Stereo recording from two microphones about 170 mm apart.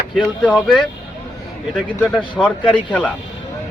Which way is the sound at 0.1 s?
5° left (ahead or behind).